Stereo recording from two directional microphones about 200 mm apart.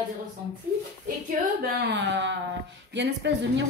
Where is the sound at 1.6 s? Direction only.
55° right (ahead or behind).